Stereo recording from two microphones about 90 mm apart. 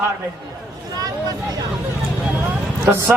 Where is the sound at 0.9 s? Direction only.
45° right (ahead or behind).